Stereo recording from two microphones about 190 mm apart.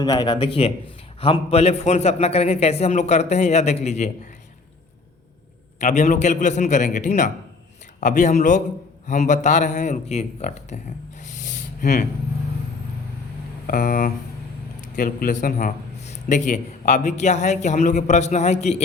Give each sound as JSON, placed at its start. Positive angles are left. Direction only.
{"t": 0.0, "sound": "a man's voice", "side_deg": 20}
{"t": 5.8, "sound": "a man's voice", "side_deg": 40}
{"t": 11.2, "sound": "a sound", "side_deg": 40}
{"t": 13.7, "sound": "a man's voice", "side_deg": 45}